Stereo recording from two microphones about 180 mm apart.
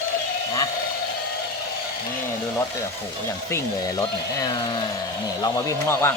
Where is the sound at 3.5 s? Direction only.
20° left (ahead or behind).